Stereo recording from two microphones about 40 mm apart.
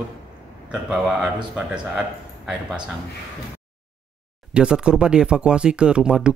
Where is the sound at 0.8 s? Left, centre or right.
Centre.